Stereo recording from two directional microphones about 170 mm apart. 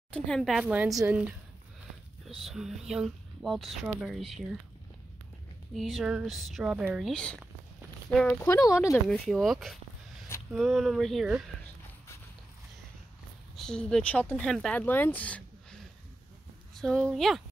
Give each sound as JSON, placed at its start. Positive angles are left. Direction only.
{"t": 0.1, "sound": "speech", "side_deg": 5}
{"t": 5.8, "sound": "speech", "side_deg": 0}
{"t": 8.6, "sound": "speech", "side_deg": 15}
{"t": 9.1, "sound": "speech", "side_deg": 0}
{"t": 13.6, "sound": "speech", "side_deg": 5}